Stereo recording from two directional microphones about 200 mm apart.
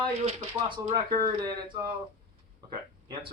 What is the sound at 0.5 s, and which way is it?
Speech, 20° right (ahead or behind).